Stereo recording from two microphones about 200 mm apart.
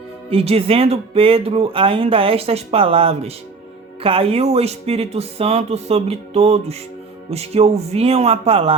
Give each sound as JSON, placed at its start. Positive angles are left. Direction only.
{"t": 0.3, "sound": "speech", "side_deg": -30}